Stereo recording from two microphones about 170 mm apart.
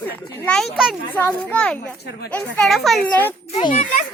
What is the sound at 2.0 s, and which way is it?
Speech, 70° left (ahead or behind).